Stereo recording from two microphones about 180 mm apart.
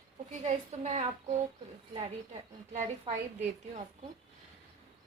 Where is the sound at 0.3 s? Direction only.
40° right (ahead or behind).